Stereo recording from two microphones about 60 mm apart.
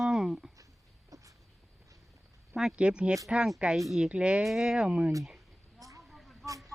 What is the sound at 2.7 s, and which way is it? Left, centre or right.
Speech, centre.